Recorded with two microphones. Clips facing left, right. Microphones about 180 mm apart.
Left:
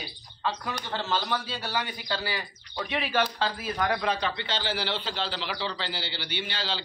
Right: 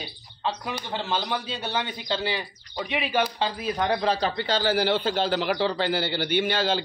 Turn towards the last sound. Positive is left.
turn(degrees=-50)  # may be behind; listen again after turning